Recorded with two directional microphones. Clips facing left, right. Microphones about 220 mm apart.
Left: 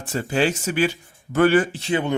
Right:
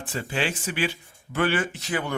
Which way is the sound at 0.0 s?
45° left (ahead or behind).